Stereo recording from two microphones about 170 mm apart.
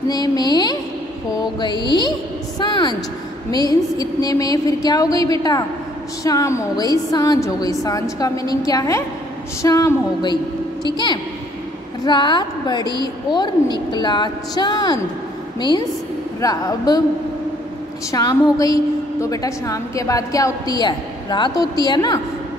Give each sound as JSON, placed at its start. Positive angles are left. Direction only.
{"t": 0.1, "sound": "a woman's voice", "side_deg": 25}
{"t": 16.3, "sound": "a woman's voice", "side_deg": 20}
{"t": 18.1, "sound": "a woman's voice", "side_deg": 20}